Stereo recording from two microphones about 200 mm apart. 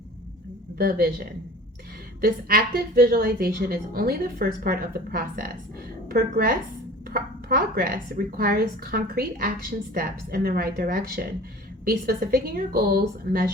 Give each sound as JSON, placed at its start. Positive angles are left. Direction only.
{"t": 0.8, "sound": "speech", "side_deg": -50}